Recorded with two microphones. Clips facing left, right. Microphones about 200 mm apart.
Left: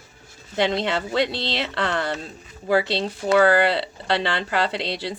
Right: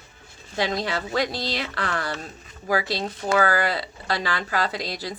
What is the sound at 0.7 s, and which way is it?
Speech, 25° left (ahead or behind).